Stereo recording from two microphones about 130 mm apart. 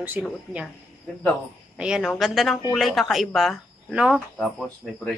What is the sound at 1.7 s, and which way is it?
A woman's voice, 5° right (ahead or behind).